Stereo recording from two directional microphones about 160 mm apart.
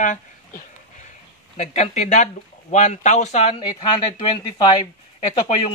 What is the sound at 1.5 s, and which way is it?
Speech, 45° left (ahead or behind).